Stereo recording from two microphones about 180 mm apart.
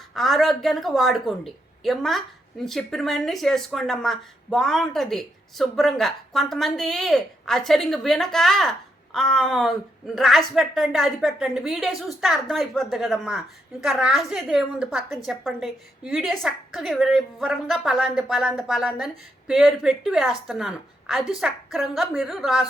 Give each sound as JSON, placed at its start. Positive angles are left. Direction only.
{"t": 0.1, "sound": "a woman's voice", "side_deg": 0}